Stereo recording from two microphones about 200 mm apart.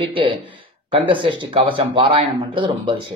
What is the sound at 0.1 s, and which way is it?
Speech, 25° right (ahead or behind).